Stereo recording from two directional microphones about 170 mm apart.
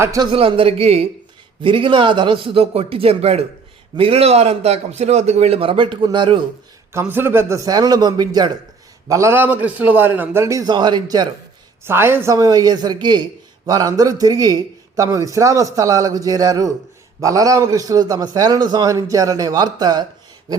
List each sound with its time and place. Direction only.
0.0 s a man's voice: 20° right (ahead or behind)
6.9 s a man's voice: 15° right (ahead or behind)
11.9 s a man's voice: 15° right (ahead or behind)